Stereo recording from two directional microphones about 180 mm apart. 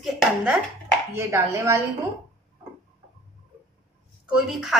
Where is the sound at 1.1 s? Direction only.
15° right (ahead or behind).